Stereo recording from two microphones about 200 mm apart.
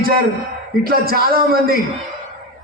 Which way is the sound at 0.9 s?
50° right (ahead or behind).